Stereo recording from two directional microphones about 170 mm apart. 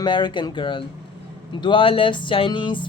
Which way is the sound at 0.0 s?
25° left (ahead or behind).